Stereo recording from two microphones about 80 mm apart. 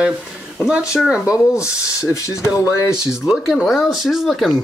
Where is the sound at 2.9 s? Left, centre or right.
Centre.